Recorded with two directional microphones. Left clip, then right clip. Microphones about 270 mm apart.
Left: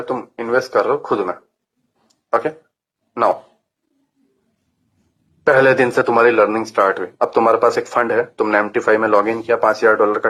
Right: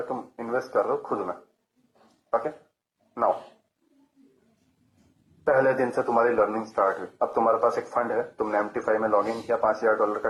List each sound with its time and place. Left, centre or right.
0.1 s speech: left
5.4 s speech: left